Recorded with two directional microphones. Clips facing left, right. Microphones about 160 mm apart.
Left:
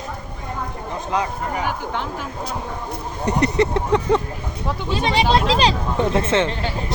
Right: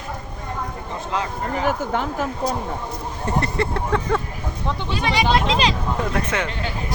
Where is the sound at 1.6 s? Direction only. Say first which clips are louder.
Right 6 dB; 40° right (ahead or behind).